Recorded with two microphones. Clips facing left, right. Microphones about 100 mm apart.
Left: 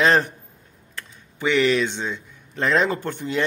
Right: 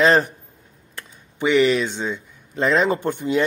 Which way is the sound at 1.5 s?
5° right (ahead or behind).